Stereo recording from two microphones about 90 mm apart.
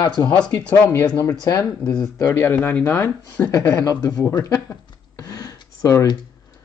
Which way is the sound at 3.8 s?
45° left (ahead or behind).